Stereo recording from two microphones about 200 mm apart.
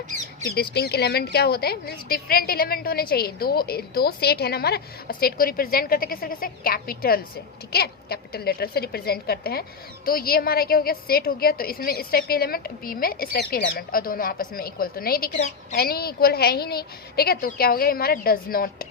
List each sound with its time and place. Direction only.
0.5 s a woman's voice: 50° left (ahead or behind)